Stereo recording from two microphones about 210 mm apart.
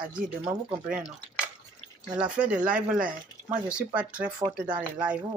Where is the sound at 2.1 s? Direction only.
5° right (ahead or behind).